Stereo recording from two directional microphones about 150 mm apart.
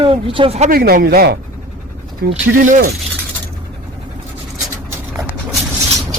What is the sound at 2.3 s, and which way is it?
Speech, 55° right (ahead or behind).